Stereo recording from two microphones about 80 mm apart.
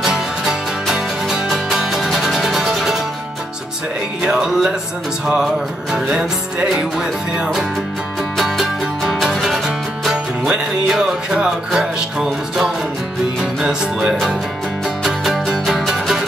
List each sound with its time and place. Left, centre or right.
0.0 s music: centre
4.2 s music: centre